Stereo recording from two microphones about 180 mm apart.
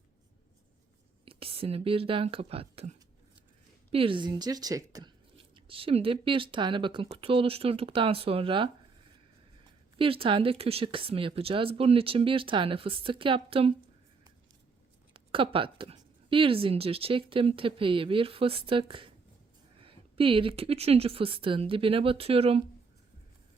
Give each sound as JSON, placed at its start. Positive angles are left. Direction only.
{"t": 1.2, "sound": "speech", "side_deg": -30}
{"t": 3.9, "sound": "a woman's voice", "side_deg": -30}
{"t": 5.5, "sound": "a woman's voice", "side_deg": -30}
{"t": 10.0, "sound": "speech", "side_deg": -30}
{"t": 15.1, "sound": "a woman's voice", "side_deg": -30}